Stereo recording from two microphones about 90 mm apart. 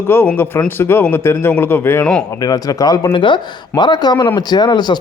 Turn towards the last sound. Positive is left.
turn(degrees=55)  # may be behind; listen again after turning